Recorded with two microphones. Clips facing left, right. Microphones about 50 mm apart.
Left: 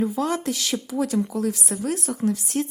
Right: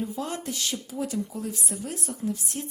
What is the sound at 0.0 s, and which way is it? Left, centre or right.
A woman's voice, left.